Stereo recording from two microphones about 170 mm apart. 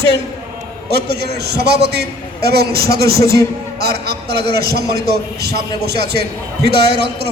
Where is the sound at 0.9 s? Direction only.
75° right (ahead or behind).